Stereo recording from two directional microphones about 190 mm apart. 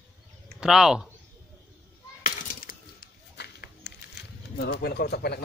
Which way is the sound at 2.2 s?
50° left (ahead or behind).